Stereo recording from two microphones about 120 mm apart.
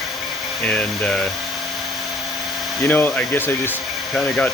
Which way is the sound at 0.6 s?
10° left (ahead or behind).